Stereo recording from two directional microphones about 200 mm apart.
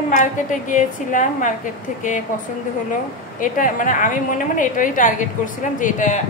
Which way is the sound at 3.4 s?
40° left (ahead or behind).